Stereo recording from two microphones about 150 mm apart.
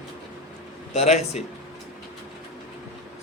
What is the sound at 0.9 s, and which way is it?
Speech, 45° left (ahead or behind).